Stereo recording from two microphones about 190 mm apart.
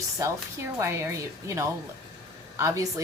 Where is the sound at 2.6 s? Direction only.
15° right (ahead or behind).